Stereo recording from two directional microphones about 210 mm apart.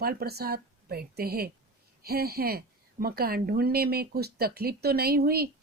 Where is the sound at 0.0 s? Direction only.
45° right (ahead or behind).